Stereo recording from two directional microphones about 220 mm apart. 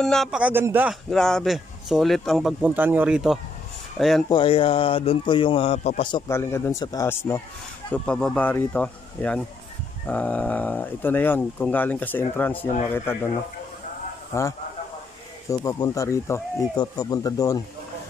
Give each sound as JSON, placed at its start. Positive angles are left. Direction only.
{"t": 0.0, "sound": "speech", "side_deg": 0}
{"t": 4.3, "sound": "speech", "side_deg": 25}
{"t": 14.3, "sound": "speech", "side_deg": 15}